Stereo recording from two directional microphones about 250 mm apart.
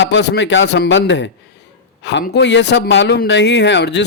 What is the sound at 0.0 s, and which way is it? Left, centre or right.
A man's voice, left.